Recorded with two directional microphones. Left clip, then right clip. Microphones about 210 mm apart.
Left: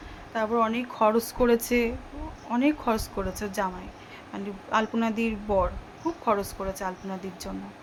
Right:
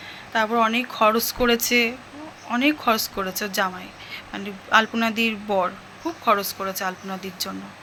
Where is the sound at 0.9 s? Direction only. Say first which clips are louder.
Right 4 dB; 15° left (ahead or behind).